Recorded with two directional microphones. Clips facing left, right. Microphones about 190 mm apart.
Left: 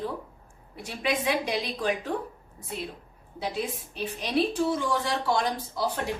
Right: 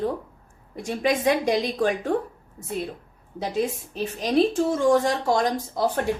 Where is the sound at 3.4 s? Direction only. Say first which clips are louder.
Right 6 dB; 45° right (ahead or behind).